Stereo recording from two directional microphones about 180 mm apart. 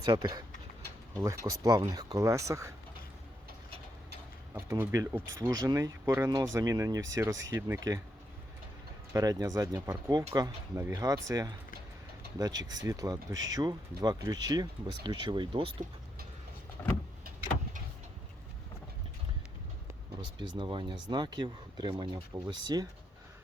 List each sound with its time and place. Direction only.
0.0 s speech: 20° right (ahead or behind)
4.5 s speech: 15° right (ahead or behind)
9.1 s speech: 20° right (ahead or behind)
16.8 s vehicle: 15° left (ahead or behind)
20.4 s speech: 25° right (ahead or behind)